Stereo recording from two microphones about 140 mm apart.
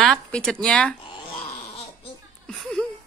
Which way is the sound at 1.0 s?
40° left (ahead or behind).